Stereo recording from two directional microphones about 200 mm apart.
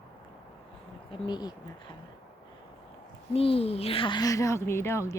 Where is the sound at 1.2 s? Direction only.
20° left (ahead or behind).